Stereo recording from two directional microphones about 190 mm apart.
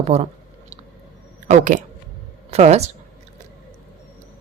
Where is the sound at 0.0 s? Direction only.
35° right (ahead or behind).